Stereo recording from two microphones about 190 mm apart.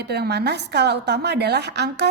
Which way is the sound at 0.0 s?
60° right (ahead or behind).